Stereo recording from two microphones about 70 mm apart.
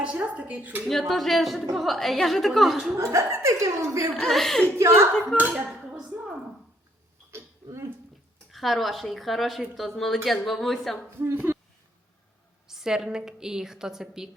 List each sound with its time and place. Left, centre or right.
0.0 s speech: centre
0.9 s a woman's voice: centre
2.9 s speech: right
4.2 s a woman's voice: centre
4.8 s speech: right
5.4 s speech: right
6.0 s dishes: centre
7.3 s burping: right
8.5 s a woman's voice: centre
11.5 s a sound: right
12.6 s a woman's voice: centre